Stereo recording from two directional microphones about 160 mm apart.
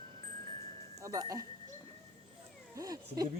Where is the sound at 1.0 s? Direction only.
20° right (ahead or behind).